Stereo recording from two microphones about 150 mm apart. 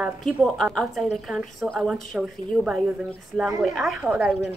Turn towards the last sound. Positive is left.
turn(degrees=-5)  # may be behind; listen again after turning